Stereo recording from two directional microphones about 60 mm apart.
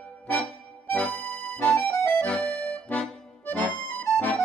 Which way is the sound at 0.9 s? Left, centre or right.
Left.